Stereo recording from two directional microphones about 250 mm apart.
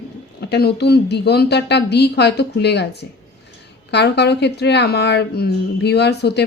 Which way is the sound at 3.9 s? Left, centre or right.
Left.